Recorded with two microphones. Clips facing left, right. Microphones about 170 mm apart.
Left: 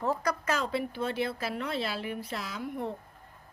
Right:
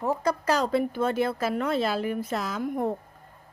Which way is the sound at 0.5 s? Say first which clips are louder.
Right 6 dB; 40° right (ahead or behind).